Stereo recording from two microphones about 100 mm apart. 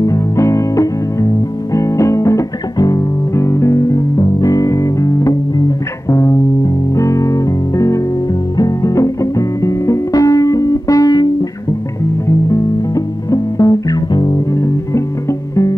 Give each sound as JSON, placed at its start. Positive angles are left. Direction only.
{"t": 0.0, "sound": "music", "side_deg": 30}
{"t": 12.3, "sound": "music", "side_deg": 35}
{"t": 14.1, "sound": "music", "side_deg": 45}